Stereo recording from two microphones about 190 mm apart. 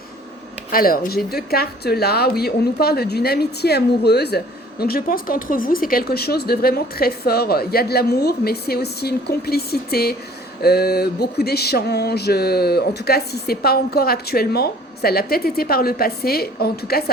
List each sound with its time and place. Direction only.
0.7 s a woman's voice: 50° left (ahead or behind)